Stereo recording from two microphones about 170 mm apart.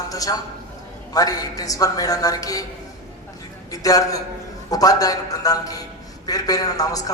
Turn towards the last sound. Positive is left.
turn(degrees=20)  # may be behind; listen again after turning